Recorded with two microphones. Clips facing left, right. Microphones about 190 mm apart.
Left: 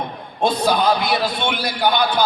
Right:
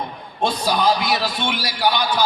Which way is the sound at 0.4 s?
60° left (ahead or behind).